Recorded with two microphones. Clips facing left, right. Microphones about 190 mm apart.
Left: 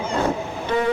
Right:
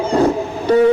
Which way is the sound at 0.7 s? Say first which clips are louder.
Right 10 dB; 40° right (ahead or behind).